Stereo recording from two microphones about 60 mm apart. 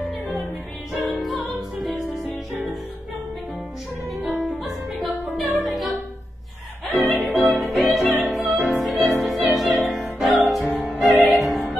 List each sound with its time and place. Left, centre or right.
1.0 s music: centre
4.5 s music: centre
6.9 s music: right
7.5 s music: centre